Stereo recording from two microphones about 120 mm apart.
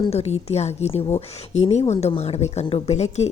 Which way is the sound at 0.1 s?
60° left (ahead or behind).